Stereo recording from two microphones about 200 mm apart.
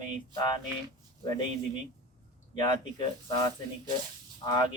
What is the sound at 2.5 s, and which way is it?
Speech, 25° left (ahead or behind).